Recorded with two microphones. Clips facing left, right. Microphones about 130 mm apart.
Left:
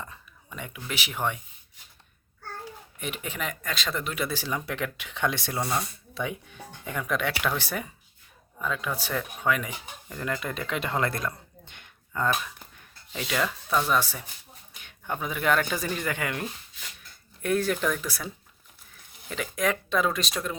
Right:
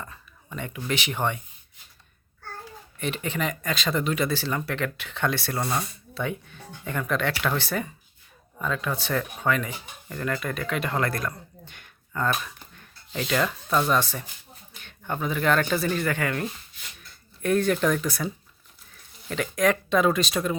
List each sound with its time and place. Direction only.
0.0 s speech: 15° left (ahead or behind)
3.0 s speech: 10° left (ahead or behind)
12.3 s speech: centre (ahead or behind)
19.3 s speech: 5° left (ahead or behind)